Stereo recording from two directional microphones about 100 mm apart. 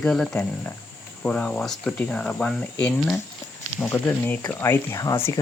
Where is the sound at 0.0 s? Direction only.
5° left (ahead or behind).